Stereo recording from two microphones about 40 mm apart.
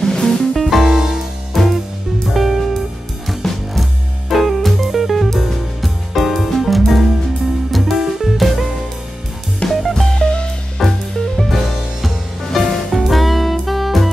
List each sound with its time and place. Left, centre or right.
0.0 s music: centre
0.6 s music: centre
1.5 s music: centre
9.7 s music: centre
10.1 s music: left
10.8 s music: centre